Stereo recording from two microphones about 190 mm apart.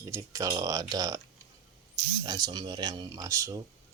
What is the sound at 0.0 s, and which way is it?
Speech, 15° right (ahead or behind).